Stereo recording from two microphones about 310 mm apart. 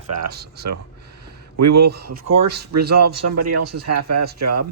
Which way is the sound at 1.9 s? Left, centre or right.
Right.